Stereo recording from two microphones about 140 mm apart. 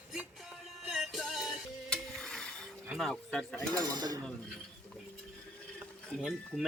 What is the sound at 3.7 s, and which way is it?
Speech, 30° right (ahead or behind).